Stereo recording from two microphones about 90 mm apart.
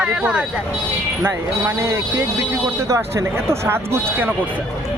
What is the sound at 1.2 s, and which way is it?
Speech, 30° right (ahead or behind).